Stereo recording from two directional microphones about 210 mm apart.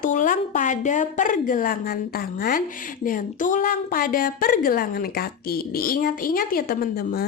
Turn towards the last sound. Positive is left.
turn(degrees=45)  # may be behind; listen again after turning